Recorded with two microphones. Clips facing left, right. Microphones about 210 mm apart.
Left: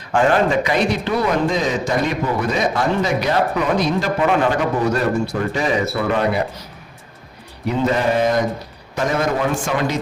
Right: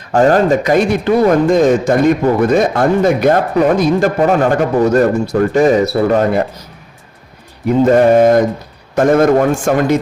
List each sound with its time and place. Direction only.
0.1 s speech: 40° right (ahead or behind)
7.7 s speech: 50° right (ahead or behind)